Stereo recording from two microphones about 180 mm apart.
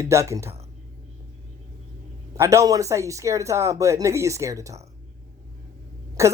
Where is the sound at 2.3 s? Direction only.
15° right (ahead or behind).